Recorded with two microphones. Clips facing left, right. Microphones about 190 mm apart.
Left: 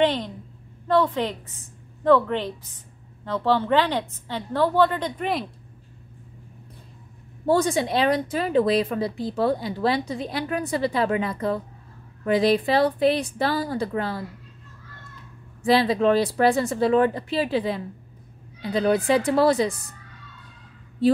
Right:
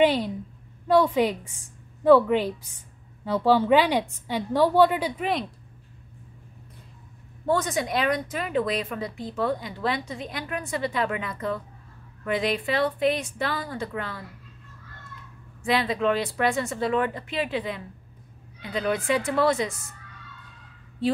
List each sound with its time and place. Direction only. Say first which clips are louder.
0.0 s a woman's voice: right 1 dB; 10° right (ahead or behind)
7.4 s speech: left 4 dB; 30° left (ahead or behind)
15.6 s speech: left 5 dB; 35° left (ahead or behind)